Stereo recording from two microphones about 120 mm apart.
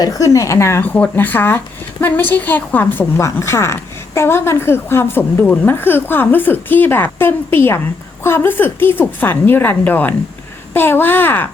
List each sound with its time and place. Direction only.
0.0 s a woman's voice: 30° left (ahead or behind)